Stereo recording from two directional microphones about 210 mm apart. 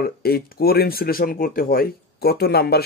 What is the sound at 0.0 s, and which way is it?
Speech, 45° left (ahead or behind).